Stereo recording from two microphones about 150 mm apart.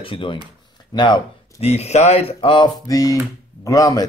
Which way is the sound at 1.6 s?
45° left (ahead or behind).